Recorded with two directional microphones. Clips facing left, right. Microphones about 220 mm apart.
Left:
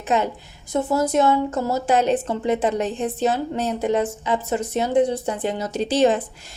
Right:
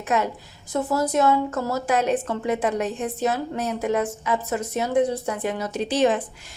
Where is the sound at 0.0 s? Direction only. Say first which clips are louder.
Left 2 dB; 25° left (ahead or behind).